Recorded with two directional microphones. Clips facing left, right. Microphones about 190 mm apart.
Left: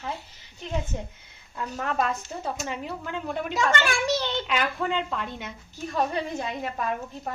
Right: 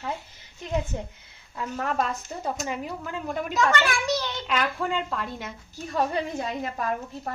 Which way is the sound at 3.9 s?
25° left (ahead or behind).